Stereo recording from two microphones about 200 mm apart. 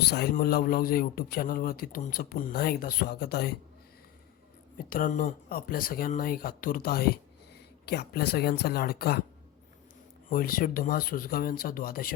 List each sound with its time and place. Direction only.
0.0 s a man's voice: 55° left (ahead or behind)
4.8 s a man's voice: 45° left (ahead or behind)
10.2 s a man's voice: 45° left (ahead or behind)